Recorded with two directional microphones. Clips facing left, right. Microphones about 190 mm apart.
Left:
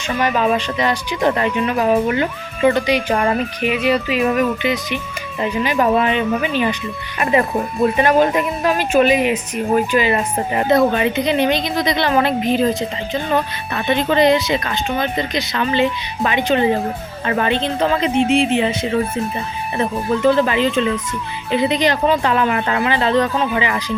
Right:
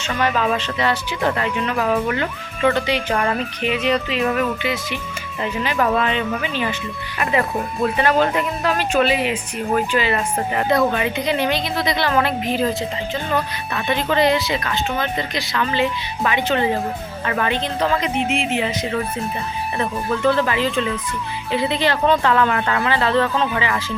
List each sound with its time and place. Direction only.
0.2 s speech: 15° left (ahead or behind)
13.8 s speech: 20° left (ahead or behind)
17.2 s speech: 30° left (ahead or behind)